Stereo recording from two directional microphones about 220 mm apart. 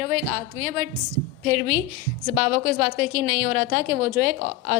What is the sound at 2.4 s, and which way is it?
A woman's voice, 40° right (ahead or behind).